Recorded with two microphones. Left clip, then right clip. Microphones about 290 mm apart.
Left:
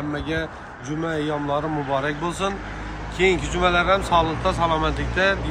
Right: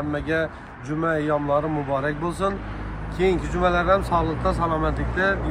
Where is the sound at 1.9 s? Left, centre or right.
Centre.